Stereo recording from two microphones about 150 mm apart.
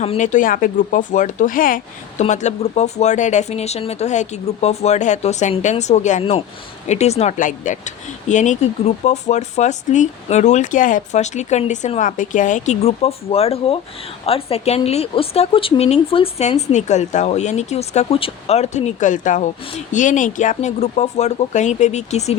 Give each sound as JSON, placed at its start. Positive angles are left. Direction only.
{"t": 0.0, "sound": "speech", "side_deg": 50}
{"t": 2.2, "sound": "speech", "side_deg": 50}